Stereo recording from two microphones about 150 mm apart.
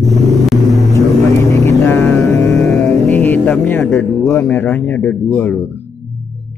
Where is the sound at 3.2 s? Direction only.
10° left (ahead or behind).